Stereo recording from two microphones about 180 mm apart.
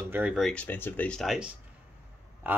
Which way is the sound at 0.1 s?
5° right (ahead or behind).